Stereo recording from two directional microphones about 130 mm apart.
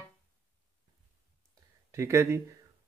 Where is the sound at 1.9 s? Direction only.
20° right (ahead or behind).